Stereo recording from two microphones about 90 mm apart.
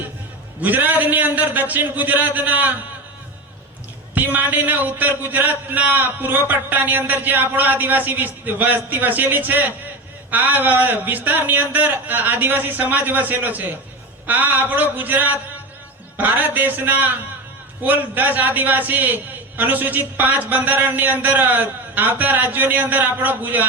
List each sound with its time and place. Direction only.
0.6 s a man's voice: 20° right (ahead or behind)
4.1 s a man's voice: 20° right (ahead or behind)